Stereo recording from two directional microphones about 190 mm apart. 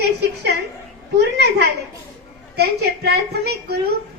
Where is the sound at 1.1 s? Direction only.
65° right (ahead or behind).